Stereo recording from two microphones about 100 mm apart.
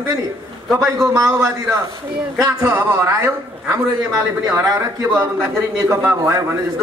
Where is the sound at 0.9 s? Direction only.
30° right (ahead or behind).